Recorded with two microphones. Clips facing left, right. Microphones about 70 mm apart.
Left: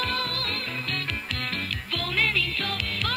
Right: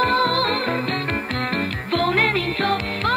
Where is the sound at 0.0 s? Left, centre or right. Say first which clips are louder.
Right 11 dB; right.